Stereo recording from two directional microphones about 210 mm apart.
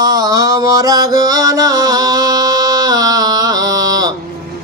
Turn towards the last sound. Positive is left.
turn(degrees=-15)  # may be behind; listen again after turning